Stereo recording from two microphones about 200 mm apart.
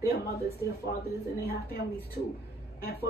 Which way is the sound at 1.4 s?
50° left (ahead or behind).